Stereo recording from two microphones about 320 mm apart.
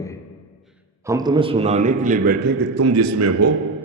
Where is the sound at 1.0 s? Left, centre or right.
Centre.